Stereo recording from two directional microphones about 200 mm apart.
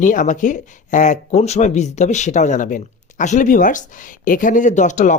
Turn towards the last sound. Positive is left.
turn(degrees=40)  # may be behind; listen again after turning